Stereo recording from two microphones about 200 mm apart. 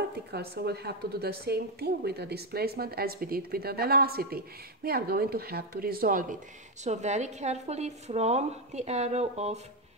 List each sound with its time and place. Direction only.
0.3 s a woman's voice: 55° right (ahead or behind); by 9.6 s 35° right (ahead or behind)